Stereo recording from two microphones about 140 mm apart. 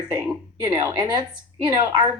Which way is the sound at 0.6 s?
30° right (ahead or behind).